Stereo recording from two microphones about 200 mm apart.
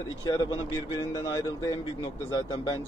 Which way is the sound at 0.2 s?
20° left (ahead or behind).